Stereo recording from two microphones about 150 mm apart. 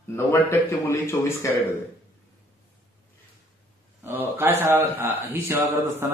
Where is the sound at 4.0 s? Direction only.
15° right (ahead or behind).